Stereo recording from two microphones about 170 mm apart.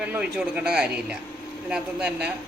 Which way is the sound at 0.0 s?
5° right (ahead or behind).